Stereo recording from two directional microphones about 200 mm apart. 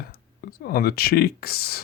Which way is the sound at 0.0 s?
50° left (ahead or behind).